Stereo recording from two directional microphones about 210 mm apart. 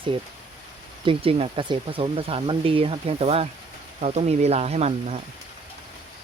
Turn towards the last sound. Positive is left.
turn(degrees=-30)  # may be behind; listen again after turning